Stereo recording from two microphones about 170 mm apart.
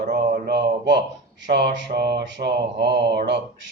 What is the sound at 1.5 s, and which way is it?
Mantra, 75° right (ahead or behind).